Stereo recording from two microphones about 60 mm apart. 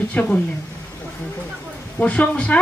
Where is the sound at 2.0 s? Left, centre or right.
Left.